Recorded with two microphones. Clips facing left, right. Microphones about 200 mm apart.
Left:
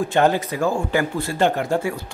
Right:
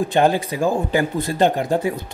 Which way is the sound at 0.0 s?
15° right (ahead or behind).